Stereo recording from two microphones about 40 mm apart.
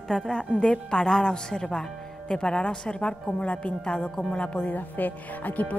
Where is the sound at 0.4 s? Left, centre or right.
Left.